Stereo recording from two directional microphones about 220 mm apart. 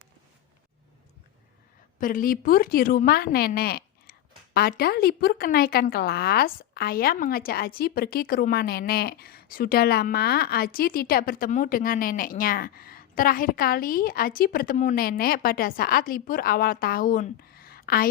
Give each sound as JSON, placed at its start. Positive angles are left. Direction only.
{"t": 2.0, "sound": "a woman's voice", "side_deg": 40}